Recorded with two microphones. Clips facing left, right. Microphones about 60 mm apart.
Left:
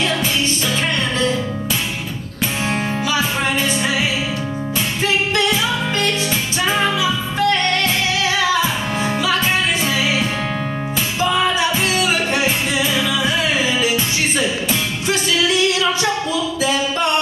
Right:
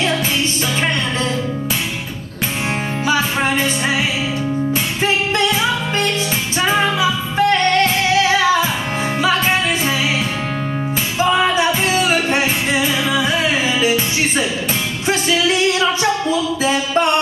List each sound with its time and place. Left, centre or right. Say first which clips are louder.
3.1 s music: right 4 dB; right
5.0 s music: right 1 dB; right
11.9 s music: right 2 dB; right
15.0 s music: right 2 dB; right